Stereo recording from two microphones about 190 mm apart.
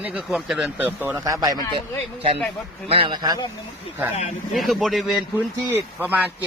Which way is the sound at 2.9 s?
25° right (ahead or behind).